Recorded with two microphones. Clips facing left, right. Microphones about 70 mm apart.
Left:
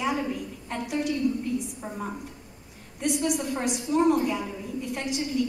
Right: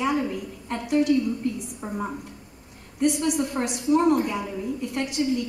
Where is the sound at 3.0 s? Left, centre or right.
Centre.